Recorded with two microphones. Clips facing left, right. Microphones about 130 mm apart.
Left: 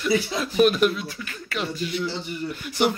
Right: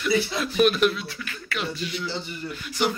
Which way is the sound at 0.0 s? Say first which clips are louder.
Left 1 dB; 25° left (ahead or behind).